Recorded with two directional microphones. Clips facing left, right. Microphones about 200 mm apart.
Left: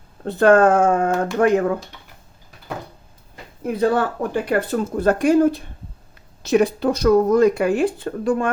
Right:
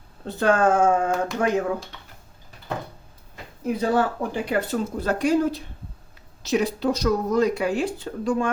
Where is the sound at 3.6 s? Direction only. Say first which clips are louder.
Left 3 dB; 55° left (ahead or behind).